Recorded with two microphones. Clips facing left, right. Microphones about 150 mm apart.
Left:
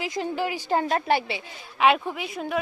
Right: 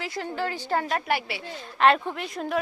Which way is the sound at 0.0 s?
15° left (ahead or behind).